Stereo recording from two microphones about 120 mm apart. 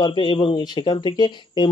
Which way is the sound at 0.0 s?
40° left (ahead or behind).